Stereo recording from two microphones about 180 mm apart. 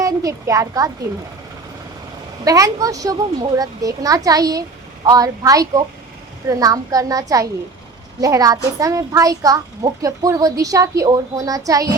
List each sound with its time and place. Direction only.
0.0 s a woman's voice: 20° right (ahead or behind)
2.4 s a child's voice: 20° right (ahead or behind)